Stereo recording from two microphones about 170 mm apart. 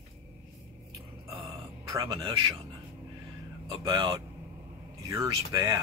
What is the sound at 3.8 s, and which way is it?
Speech, 30° right (ahead or behind).